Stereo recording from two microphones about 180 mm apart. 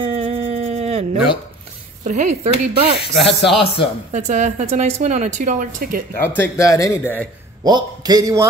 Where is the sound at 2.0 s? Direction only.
40° right (ahead or behind).